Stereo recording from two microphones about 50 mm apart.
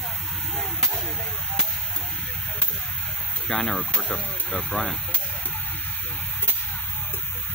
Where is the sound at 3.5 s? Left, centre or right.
Centre.